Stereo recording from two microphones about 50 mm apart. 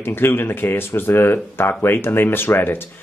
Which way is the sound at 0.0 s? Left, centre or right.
Left.